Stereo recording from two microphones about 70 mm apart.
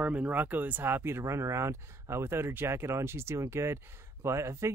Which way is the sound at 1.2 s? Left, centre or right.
Right.